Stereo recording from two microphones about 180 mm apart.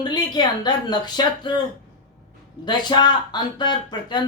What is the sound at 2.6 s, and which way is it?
Speech, 25° left (ahead or behind).